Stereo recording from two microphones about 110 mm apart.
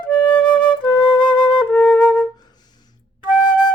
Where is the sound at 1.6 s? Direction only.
10° left (ahead or behind).